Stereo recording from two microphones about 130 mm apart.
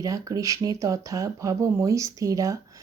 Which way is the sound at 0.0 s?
25° right (ahead or behind).